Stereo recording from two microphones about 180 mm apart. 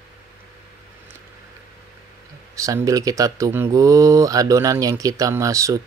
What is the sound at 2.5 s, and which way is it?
Speech, 15° right (ahead or behind).